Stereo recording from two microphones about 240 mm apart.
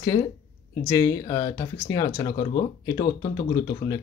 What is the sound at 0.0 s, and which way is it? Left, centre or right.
Speech, centre.